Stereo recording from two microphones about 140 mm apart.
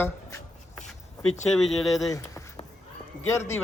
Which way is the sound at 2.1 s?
25° left (ahead or behind).